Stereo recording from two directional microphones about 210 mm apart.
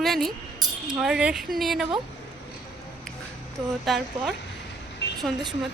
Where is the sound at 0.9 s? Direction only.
5° right (ahead or behind).